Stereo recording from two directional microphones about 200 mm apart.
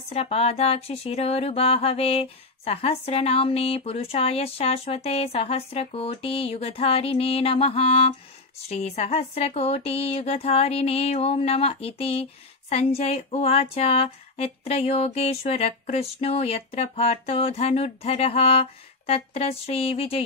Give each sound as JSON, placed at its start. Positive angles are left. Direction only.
{"t": 0.1, "sound": "speech", "side_deg": 30}